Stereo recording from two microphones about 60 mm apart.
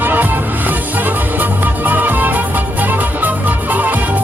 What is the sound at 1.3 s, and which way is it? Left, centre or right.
Music, right.